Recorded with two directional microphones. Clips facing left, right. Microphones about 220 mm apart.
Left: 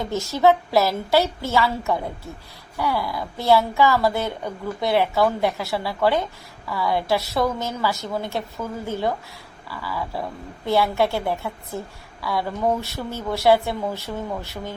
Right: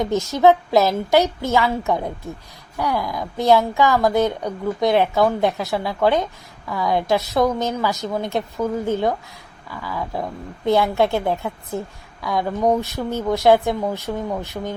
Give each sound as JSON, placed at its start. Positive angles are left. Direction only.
{"t": 0.0, "sound": "a woman's voice", "side_deg": -15}